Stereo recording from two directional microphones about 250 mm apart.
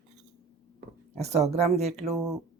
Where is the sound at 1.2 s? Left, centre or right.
Right.